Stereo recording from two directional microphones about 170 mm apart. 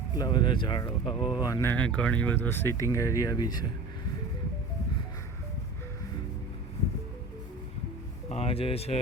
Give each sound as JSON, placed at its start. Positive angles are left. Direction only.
{"t": 0.2, "sound": "speech", "side_deg": 25}
{"t": 1.7, "sound": "speech", "side_deg": 5}
{"t": 8.3, "sound": "speech", "side_deg": 35}